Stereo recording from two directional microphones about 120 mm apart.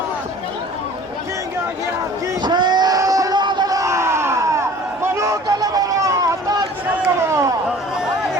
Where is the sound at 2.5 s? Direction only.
35° right (ahead or behind).